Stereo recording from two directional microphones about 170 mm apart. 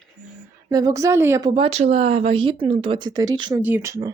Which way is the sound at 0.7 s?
20° right (ahead or behind).